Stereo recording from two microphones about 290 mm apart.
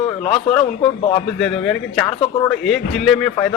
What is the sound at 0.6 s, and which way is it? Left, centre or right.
Speech, centre.